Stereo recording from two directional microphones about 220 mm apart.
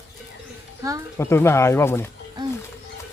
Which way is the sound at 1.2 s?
10° left (ahead or behind).